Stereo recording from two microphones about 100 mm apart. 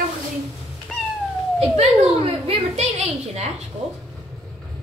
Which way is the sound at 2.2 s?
85° right.